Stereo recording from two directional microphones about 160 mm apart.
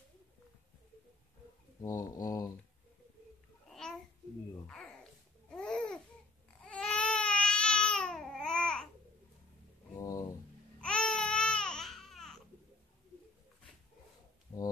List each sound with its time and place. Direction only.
1.8 s speech: 25° left (ahead or behind)
3.7 s babbling: centre (ahead or behind)
4.6 s speech: 5° left (ahead or behind)
5.5 s babbling: 5° left (ahead or behind)
9.9 s a sound: 25° left (ahead or behind)
10.8 s baby cry: 5° left (ahead or behind)
14.5 s music: 15° left (ahead or behind)